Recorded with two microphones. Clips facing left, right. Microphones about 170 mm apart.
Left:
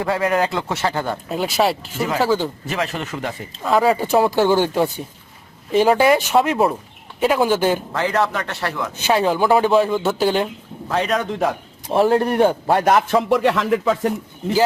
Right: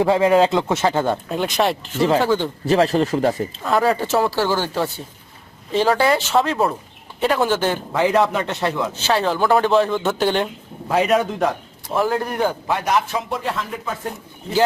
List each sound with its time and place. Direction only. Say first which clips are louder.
0.0 s a man's voice: right 5 dB; 20° right (ahead or behind)
1.3 s speech: left 1 dB; 5° left (ahead or behind)
2.6 s speech: right 8 dB; 35° right (ahead or behind)
3.6 s speech: left 3 dB; 5° left (ahead or behind)
7.9 s a man's voice: right 3 dB; 15° right (ahead or behind)
9.0 s speech: left 4 dB; 15° left (ahead or behind); by 11.4 s 5° right (ahead or behind)
11.9 s a man's voice: left 5 dB; 25° left (ahead or behind)
12.6 s a man's voice: left 4 dB; 50° left (ahead or behind); by 14.1 s 90° left